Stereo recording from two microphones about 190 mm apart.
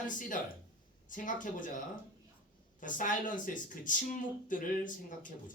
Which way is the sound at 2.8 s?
45° left (ahead or behind).